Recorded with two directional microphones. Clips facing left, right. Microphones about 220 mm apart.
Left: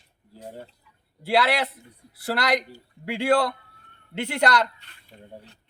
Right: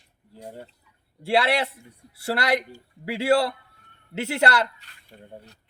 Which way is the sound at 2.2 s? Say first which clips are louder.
Even; centre (ahead or behind).